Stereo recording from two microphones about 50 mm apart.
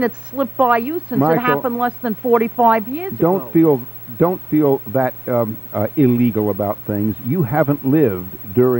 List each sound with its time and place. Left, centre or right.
0.0 s speech: right